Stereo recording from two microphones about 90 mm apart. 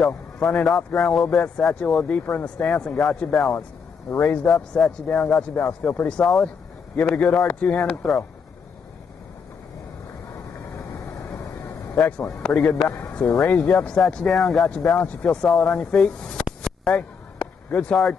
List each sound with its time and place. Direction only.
0.0 s a man's voice: 10° left (ahead or behind)
5.1 s a man's voice: 5° left (ahead or behind)
5.8 s speech: 20° left (ahead or behind)
6.1 s a man's voice: 5° left (ahead or behind)
11.4 s vehicle: 30° left (ahead or behind)
11.9 s a man's voice: 10° left (ahead or behind)
16.6 s a sound: 10° left (ahead or behind)
17.6 s speech: 15° left (ahead or behind)